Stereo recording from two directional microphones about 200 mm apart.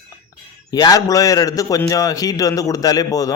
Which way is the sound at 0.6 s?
20° left (ahead or behind).